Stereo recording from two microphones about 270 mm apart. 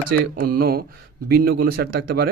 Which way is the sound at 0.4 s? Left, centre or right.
Right.